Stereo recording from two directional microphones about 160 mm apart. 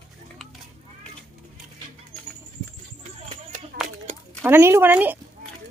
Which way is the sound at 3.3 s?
55° right (ahead or behind).